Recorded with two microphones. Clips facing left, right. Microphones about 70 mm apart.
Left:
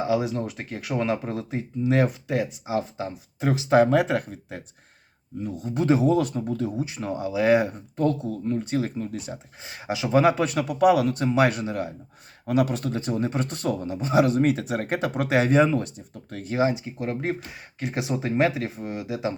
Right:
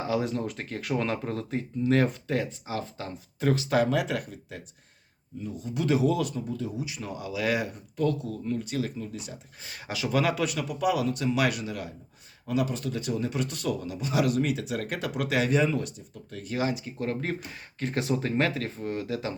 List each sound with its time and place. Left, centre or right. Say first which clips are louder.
0.0 s speech: left 4 dB; centre; by 6.8 s left
6.8 s speech: left 6 dB; left
9.6 s speech: left 4 dB; left
11.2 s speech: left 5 dB; left
12.5 s speech: left 5 dB; left
12.9 s speech: left 4 dB; left
16.5 s speech: left 6 dB; left